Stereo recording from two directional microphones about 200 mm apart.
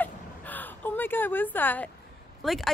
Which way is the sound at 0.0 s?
10° left (ahead or behind).